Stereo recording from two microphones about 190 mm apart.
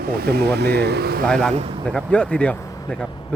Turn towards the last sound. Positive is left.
turn(degrees=5)  # may be behind; listen again after turning